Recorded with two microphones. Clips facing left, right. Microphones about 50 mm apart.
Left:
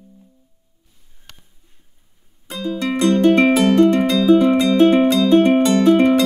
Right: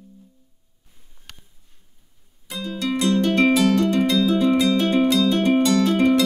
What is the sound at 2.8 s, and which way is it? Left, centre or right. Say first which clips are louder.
Music: left 5 dB; left.